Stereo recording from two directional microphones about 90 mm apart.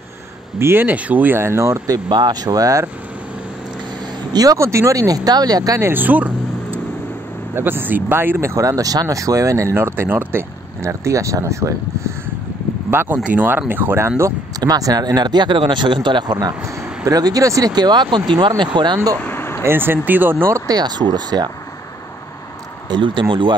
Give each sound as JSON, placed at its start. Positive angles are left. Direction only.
{"t": 0.6, "sound": "speech", "side_deg": -25}
{"t": 2.0, "sound": "speech", "side_deg": -55}
{"t": 4.3, "sound": "speech", "side_deg": -45}
{"t": 4.6, "sound": "speech", "side_deg": -30}
{"t": 5.9, "sound": "vehicle", "side_deg": -20}
{"t": 7.5, "sound": "speech", "side_deg": -25}
{"t": 12.9, "sound": "speech", "side_deg": -25}
{"t": 14.6, "sound": "speech", "side_deg": -45}
{"t": 19.1, "sound": "vehicle", "side_deg": 25}
{"t": 19.6, "sound": "speech", "side_deg": -25}
{"t": 20.5, "sound": "speech", "side_deg": -45}
{"t": 22.8, "sound": "speech", "side_deg": -60}